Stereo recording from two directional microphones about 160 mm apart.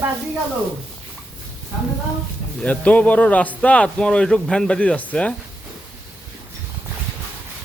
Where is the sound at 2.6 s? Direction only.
10° left (ahead or behind).